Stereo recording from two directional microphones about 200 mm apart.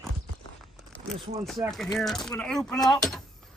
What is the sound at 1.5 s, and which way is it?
Speech, centre (ahead or behind).